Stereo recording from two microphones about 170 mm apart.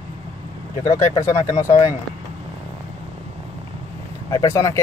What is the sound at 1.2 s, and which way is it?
Speech, 15° left (ahead or behind).